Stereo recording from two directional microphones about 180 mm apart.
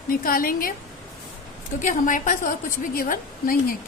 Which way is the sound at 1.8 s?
45° left (ahead or behind).